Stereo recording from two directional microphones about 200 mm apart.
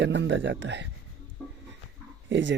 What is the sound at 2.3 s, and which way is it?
Speech, 65° right (ahead or behind).